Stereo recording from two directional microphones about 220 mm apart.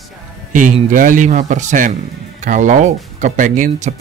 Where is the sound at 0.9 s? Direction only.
35° right (ahead or behind).